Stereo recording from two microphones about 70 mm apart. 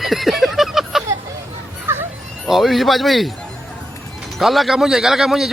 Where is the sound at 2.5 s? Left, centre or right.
Centre.